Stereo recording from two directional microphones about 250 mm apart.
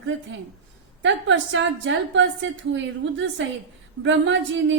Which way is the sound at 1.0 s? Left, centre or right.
Right.